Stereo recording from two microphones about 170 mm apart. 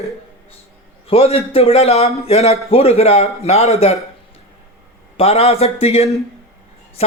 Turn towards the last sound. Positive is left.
turn(degrees=35)  # may be behind; listen again after turning